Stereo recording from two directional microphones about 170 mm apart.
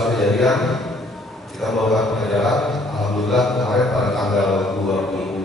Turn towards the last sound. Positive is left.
turn(degrees=0)  # may be behind; listen again after turning